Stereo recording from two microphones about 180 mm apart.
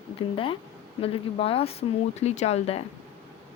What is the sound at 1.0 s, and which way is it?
A woman's voice, 30° left (ahead or behind).